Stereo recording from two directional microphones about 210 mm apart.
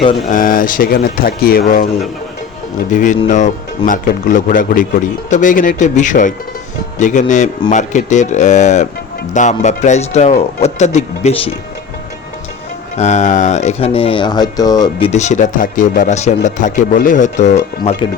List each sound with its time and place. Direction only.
0.3 s speech: 40° left (ahead or behind)
2.9 s speech: 35° left (ahead or behind)
13.0 s speech: 35° left (ahead or behind)
15.1 s speech: 35° left (ahead or behind)